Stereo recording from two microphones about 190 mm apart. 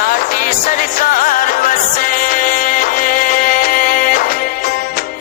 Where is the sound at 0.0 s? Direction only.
50° left (ahead or behind).